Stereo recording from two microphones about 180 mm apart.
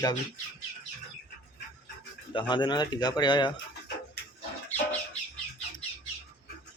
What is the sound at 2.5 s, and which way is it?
Speech, 25° left (ahead or behind).